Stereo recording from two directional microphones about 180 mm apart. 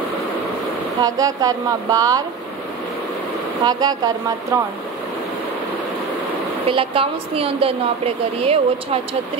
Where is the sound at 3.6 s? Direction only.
20° right (ahead or behind).